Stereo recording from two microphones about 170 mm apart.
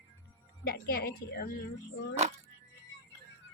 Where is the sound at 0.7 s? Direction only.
65° left (ahead or behind).